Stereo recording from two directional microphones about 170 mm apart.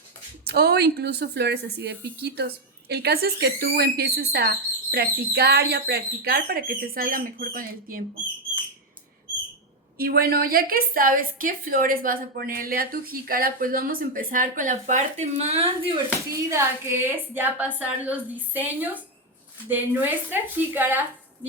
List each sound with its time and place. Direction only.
0.4 s a woman's voice: 70° right (ahead or behind)
10.0 s a woman's voice: 60° right (ahead or behind); by 16.0 s 35° right (ahead or behind)
16.3 s a woman's voice: 15° right (ahead or behind)